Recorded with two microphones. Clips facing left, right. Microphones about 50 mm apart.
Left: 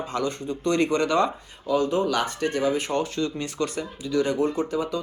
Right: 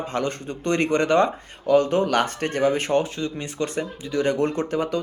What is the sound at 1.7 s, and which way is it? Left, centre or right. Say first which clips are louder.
Speech: right 4 dB; right.